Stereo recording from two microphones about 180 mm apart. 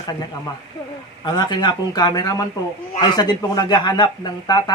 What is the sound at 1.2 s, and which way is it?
Speech, 25° left (ahead or behind).